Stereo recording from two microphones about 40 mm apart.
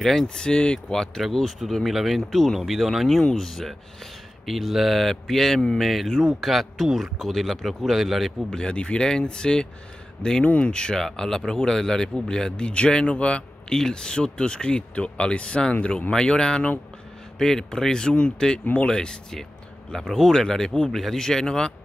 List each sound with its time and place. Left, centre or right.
0.0 s speech: centre
0.3 s a man's voice: left
1.8 s speech: centre
8.5 s speech: left
11.0 s speech: centre; by 16.1 s left
16.1 s a man's voice: left
19.9 s a man's voice: centre
20.9 s a man's voice: centre